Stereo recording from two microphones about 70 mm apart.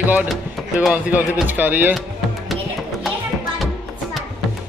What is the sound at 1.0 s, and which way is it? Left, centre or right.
Speech, right.